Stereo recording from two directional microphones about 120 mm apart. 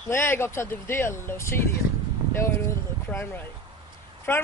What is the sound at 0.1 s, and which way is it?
Speech, 20° left (ahead or behind).